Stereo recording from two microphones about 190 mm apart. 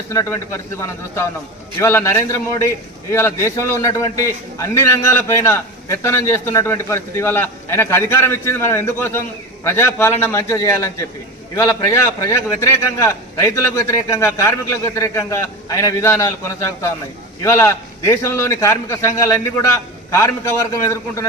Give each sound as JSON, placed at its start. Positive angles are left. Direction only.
{"t": 0.1, "sound": "a man's voice", "side_deg": 15}